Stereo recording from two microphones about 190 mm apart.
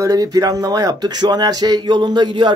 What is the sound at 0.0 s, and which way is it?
Speech, 20° right (ahead or behind).